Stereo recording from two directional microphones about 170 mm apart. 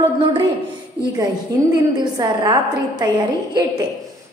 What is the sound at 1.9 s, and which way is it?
A woman's voice, 25° right (ahead or behind).